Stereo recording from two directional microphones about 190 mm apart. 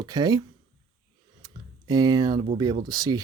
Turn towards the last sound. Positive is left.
turn(degrees=-20)  # may be behind; listen again after turning